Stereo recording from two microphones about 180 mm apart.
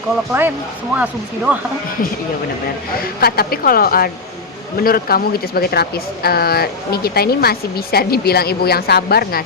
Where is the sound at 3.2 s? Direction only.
55° left (ahead or behind).